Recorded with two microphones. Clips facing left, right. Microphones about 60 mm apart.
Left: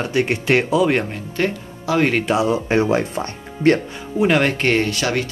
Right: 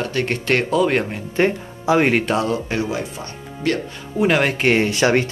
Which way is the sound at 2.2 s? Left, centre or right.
Centre.